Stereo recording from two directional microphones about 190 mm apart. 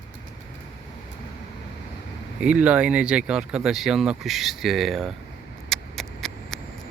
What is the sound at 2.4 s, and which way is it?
Speech, 5° right (ahead or behind).